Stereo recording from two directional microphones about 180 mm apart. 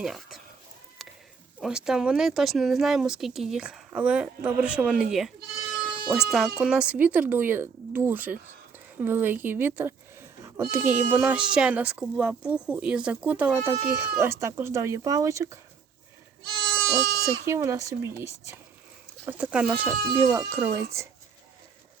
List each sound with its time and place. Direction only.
0.0 s speech: centre (ahead or behind)
1.0 s a sound: centre (ahead or behind)
1.6 s speech: 5° right (ahead or behind)
16.9 s speech: 15° right (ahead or behind)